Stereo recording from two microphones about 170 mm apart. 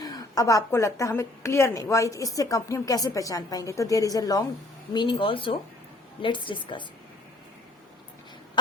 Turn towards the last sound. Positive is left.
turn(degrees=30)  # may be behind; listen again after turning